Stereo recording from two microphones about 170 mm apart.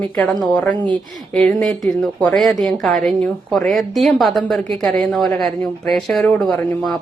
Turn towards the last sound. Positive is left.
turn(degrees=0)  # may be behind; listen again after turning